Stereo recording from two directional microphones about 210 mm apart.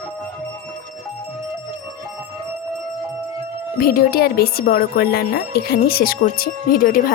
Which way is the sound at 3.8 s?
45° left (ahead or behind).